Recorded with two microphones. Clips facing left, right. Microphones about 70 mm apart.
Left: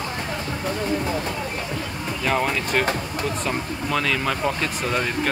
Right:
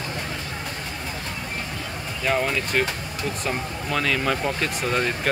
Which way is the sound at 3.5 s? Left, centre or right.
Centre.